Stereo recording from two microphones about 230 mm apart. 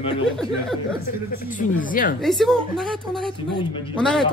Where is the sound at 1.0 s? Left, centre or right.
Left.